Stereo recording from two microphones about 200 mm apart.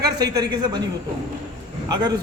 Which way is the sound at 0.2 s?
20° right (ahead or behind).